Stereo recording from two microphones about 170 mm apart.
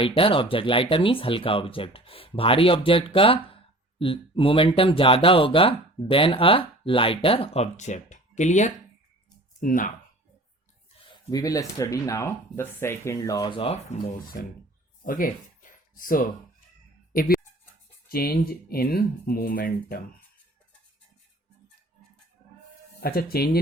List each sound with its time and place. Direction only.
0.0 s speech: 30° left (ahead or behind); by 9.9 s 50° left (ahead or behind)
11.0 s speech: 25° left (ahead or behind); by 14.4 s 40° left (ahead or behind)
15.0 s a sound: 55° left (ahead or behind)
18.1 s speech: 65° left (ahead or behind)
23.0 s speech: 65° left (ahead or behind)